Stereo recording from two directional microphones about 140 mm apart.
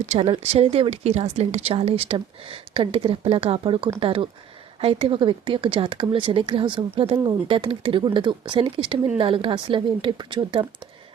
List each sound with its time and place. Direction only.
0.0 s speech: 50° right (ahead or behind); by 10.7 s 35° right (ahead or behind)